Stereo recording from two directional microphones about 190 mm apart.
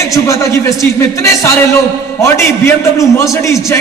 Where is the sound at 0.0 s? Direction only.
15° left (ahead or behind).